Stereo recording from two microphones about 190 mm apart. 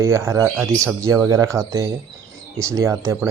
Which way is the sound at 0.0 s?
15° right (ahead or behind).